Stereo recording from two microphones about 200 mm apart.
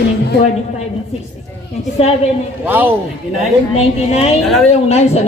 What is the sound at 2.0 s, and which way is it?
Speech, 30° left (ahead or behind).